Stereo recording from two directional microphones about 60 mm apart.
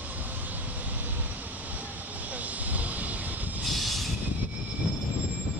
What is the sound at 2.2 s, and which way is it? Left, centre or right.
Vehicle, right.